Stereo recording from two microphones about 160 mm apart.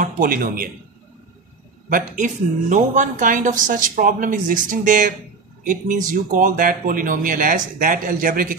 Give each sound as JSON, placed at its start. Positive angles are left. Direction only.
{"t": 0.0, "sound": "speech", "side_deg": -60}
{"t": 1.9, "sound": "a woman's voice", "side_deg": -55}